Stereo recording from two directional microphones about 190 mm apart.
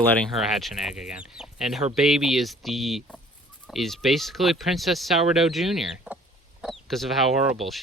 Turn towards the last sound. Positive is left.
turn(degrees=0)  # may be behind; listen again after turning